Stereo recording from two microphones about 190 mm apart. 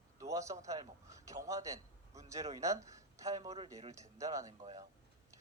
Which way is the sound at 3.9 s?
15° right (ahead or behind).